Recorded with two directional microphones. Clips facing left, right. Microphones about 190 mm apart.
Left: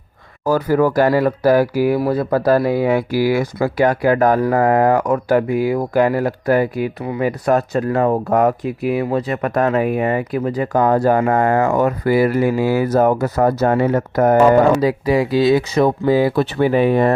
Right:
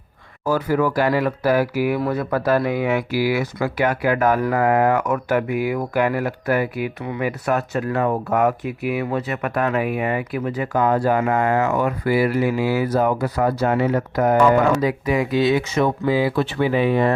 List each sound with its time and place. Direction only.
0.4 s speech: 40° left (ahead or behind)